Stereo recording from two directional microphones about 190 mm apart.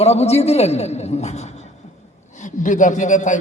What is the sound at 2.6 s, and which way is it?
Speech, 40° left (ahead or behind).